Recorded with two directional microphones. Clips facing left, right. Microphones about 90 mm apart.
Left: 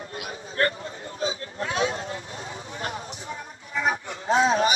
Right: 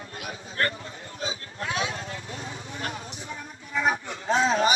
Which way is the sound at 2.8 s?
30° left (ahead or behind).